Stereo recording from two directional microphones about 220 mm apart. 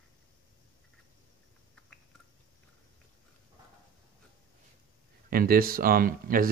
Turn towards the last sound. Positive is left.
turn(degrees=-40)  # may be behind; listen again after turning